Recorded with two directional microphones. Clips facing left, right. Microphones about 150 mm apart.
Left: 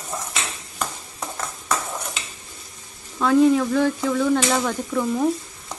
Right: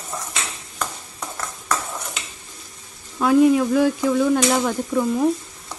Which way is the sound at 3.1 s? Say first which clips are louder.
Right 1 dB; 15° right (ahead or behind).